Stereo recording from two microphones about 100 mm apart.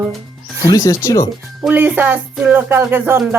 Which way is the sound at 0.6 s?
35° left (ahead or behind).